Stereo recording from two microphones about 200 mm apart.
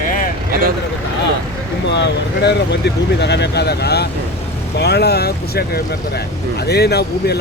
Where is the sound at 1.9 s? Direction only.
60° left (ahead or behind).